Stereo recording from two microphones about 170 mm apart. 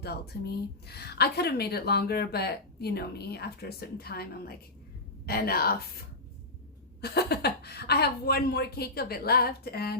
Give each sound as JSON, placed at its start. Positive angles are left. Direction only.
{"t": 0.3, "sound": "a woman's voice", "side_deg": 65}
{"t": 7.0, "sound": "a woman's voice", "side_deg": 70}